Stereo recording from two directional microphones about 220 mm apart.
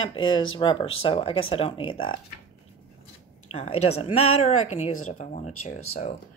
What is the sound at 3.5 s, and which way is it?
Speech, 30° left (ahead or behind).